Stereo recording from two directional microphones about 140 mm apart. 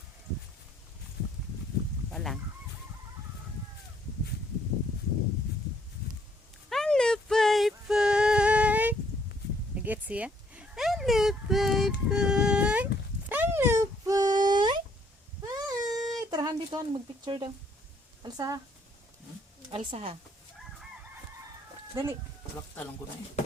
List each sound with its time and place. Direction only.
2.1 s speech: centre (ahead or behind)
6.7 s a sound: 5° left (ahead or behind); by 17.5 s 35° right (ahead or behind)
18.2 s speech: 25° right (ahead or behind)
19.7 s a woman's voice: 40° right (ahead or behind)